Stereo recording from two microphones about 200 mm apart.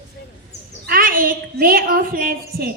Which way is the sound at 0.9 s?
45° right (ahead or behind).